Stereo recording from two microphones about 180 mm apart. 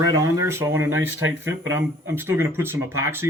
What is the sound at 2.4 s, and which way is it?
Speech, 15° right (ahead or behind).